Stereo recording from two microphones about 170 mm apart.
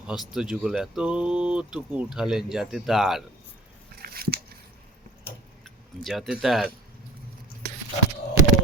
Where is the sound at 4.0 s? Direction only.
65° right (ahead or behind).